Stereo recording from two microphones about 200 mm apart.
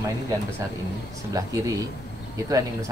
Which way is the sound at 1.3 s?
15° right (ahead or behind).